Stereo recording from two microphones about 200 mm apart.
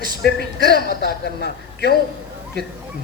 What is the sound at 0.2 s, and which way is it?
Speech, 55° left (ahead or behind).